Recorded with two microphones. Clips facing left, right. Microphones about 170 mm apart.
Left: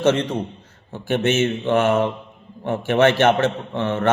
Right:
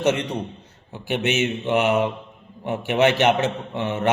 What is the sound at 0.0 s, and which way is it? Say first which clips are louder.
A man's voice: left 3 dB; 15° right (ahead or behind).